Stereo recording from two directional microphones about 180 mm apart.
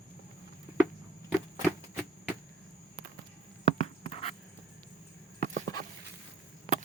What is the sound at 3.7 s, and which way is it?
Writing, 35° left (ahead or behind).